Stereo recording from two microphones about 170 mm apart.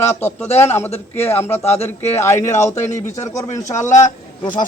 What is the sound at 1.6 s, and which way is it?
Speech, 40° left (ahead or behind).